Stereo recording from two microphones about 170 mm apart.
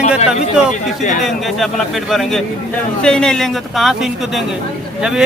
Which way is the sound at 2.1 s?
Centre (ahead or behind).